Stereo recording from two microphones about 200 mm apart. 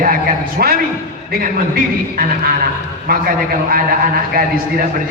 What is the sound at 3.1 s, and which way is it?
A man's voice, 50° right (ahead or behind).